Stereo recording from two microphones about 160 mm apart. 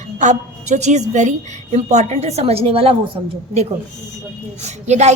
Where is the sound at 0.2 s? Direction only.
50° right (ahead or behind); by 3.3 s 30° right (ahead or behind).